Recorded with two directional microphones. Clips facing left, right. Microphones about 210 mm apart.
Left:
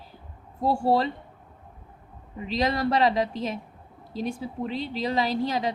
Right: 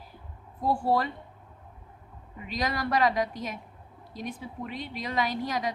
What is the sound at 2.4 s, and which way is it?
Speech, 30° left (ahead or behind).